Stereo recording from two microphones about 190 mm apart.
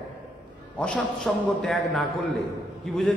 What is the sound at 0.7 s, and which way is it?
A man's voice, 5° left (ahead or behind).